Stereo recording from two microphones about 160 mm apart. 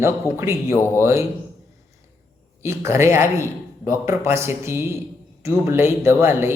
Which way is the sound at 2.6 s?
15° right (ahead or behind).